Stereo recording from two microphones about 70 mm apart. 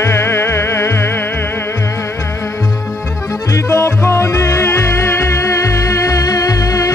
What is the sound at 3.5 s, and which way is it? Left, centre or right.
Music, left.